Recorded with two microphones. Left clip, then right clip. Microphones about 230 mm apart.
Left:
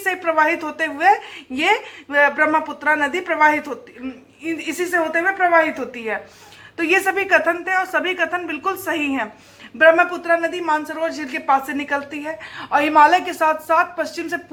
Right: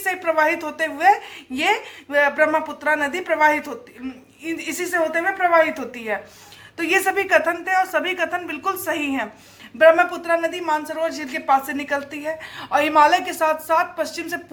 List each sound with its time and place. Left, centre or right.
0.0 s a woman's voice: right